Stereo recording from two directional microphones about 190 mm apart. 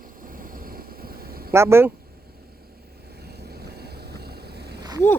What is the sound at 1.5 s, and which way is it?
Speech, 15° right (ahead or behind).